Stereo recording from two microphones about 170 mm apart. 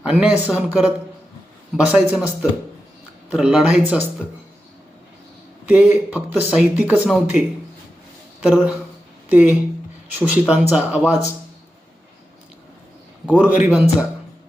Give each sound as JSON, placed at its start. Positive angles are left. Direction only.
{"t": 0.1, "sound": "speech", "side_deg": -10}
{"t": 5.6, "sound": "speech", "side_deg": -10}
{"t": 13.2, "sound": "speech", "side_deg": -5}